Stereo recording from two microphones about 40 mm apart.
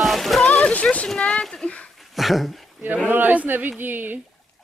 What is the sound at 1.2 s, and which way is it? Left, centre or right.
Speech, left.